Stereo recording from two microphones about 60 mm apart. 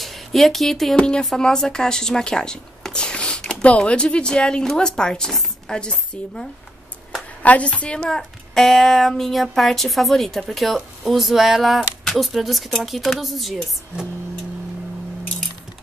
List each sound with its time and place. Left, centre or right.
0.0 s speech: centre
0.9 s speech: centre
7.4 s a woman's voice: left; by 13.7 s centre